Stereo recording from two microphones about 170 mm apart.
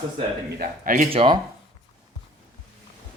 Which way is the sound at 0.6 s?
55° right (ahead or behind).